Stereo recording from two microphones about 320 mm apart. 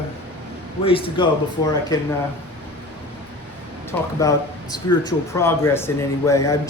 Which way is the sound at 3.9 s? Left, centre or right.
Centre.